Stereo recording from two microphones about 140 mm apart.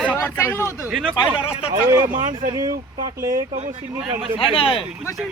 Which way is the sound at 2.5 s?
25° right (ahead or behind).